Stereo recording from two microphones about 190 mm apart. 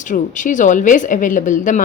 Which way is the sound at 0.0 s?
40° left (ahead or behind).